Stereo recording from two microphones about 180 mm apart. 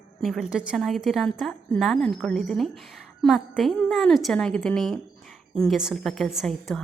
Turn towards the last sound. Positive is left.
turn(degrees=0)  # may be behind; listen again after turning